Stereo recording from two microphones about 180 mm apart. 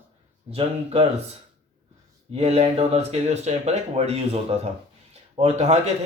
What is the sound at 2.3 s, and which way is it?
Speech, 35° right (ahead or behind).